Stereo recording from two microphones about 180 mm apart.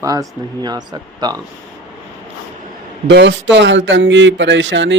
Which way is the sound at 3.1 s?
75° right (ahead or behind).